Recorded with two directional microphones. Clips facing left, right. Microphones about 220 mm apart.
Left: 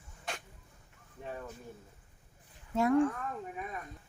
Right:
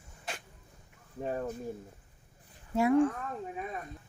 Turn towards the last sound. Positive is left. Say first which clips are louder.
# right 2 dB
turn(degrees=-10)  # may be behind; listen again after turning